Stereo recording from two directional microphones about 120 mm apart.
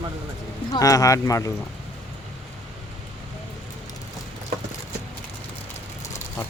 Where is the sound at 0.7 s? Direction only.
30° left (ahead or behind).